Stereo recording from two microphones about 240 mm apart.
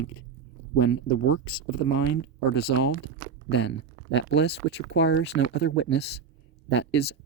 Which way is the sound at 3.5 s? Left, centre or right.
Left.